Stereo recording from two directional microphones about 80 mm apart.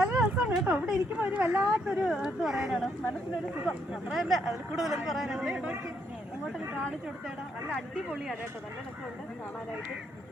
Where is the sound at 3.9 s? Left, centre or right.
Centre.